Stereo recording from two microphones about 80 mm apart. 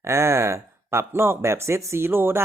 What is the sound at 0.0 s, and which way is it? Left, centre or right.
Speech, right.